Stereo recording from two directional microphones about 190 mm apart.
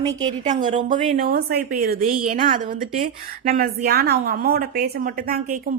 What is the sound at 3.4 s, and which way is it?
A woman's voice, 50° right (ahead or behind).